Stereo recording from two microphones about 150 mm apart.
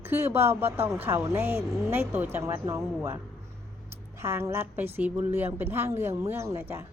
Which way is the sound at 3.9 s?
15° right (ahead or behind).